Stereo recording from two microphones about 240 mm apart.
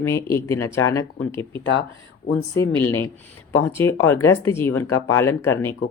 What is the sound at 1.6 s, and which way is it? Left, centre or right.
Speech, left.